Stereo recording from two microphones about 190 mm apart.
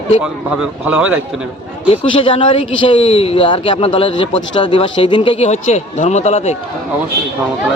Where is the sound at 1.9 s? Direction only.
30° left (ahead or behind).